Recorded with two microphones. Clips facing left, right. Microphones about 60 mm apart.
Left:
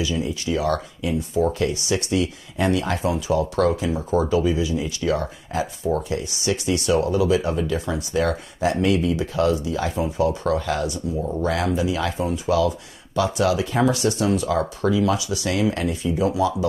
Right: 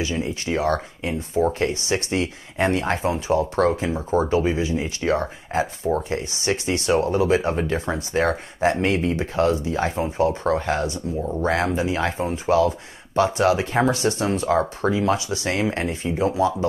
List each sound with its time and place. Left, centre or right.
0.0 s speech: right
11.1 s speech: centre
11.4 s speech: right